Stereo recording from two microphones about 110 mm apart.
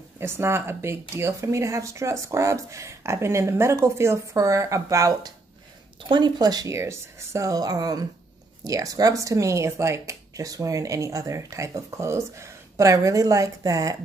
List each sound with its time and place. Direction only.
0.2 s speech: 25° right (ahead or behind)
6.0 s speech: 45° right (ahead or behind)